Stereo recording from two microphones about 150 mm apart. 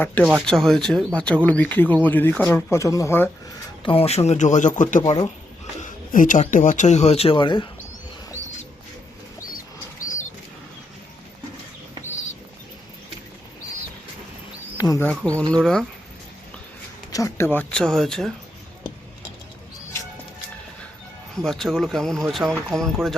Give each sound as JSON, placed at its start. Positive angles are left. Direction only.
{"t": 0.0, "sound": "speech", "side_deg": 10}
{"t": 3.8, "sound": "speech", "side_deg": 40}
{"t": 5.8, "sound": "a sound", "side_deg": 60}
{"t": 6.4, "sound": "speech", "side_deg": 60}
{"t": 10.0, "sound": "a sound", "side_deg": 55}
{"t": 14.8, "sound": "speech", "side_deg": 25}
{"t": 15.0, "sound": "speech", "side_deg": 5}
{"t": 17.1, "sound": "speech", "side_deg": 20}
{"t": 21.4, "sound": "speech", "side_deg": 0}